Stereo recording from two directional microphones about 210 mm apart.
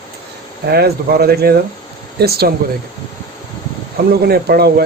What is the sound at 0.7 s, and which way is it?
Speech, 50° right (ahead or behind).